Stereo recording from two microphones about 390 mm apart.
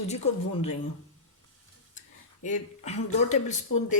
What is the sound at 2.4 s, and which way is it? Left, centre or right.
Speech, centre.